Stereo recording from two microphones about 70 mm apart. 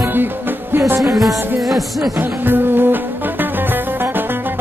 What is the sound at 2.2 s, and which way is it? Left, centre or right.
Music, right.